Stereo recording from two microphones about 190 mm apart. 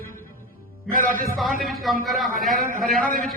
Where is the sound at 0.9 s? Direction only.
45° right (ahead or behind).